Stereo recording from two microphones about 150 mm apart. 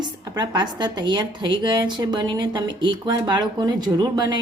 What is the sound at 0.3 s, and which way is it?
A woman's voice, 30° right (ahead or behind).